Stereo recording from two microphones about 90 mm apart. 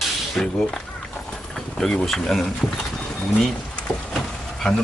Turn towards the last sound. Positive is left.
turn(degrees=10)  # may be behind; listen again after turning